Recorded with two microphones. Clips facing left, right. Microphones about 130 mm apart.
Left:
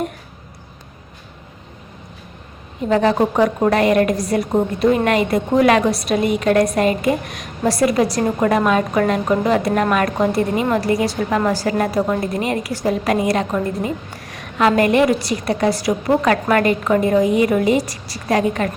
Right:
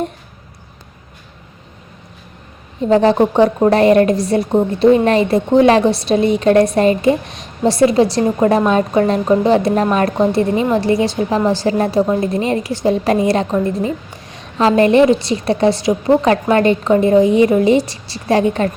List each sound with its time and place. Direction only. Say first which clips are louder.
2.9 s a woman's voice: right 4 dB; 30° right (ahead or behind)